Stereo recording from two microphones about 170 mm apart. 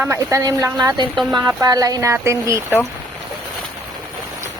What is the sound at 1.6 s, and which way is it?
Speech, 20° right (ahead or behind).